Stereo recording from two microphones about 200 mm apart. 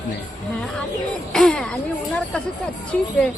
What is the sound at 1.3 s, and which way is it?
Music, 5° left (ahead or behind).